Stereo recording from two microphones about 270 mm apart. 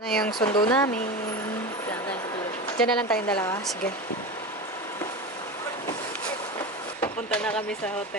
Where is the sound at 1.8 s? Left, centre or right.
Centre.